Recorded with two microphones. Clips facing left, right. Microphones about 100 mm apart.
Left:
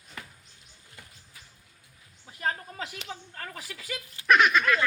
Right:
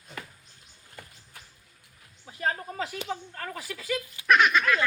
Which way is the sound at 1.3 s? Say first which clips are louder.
Right 4 dB; 65° right (ahead or behind).